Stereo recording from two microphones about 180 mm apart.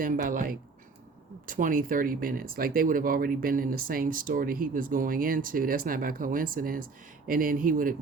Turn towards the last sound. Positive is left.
turn(degrees=-50)  # may be behind; listen again after turning